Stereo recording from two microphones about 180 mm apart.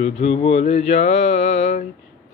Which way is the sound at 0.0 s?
35° left (ahead or behind).